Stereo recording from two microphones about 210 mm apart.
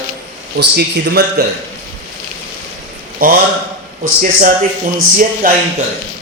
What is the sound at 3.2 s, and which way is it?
Speech, 45° right (ahead or behind).